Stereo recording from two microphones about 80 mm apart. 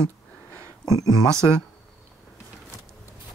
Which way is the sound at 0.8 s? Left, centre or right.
Left.